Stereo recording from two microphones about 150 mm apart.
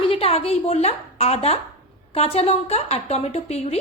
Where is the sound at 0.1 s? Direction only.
40° left (ahead or behind).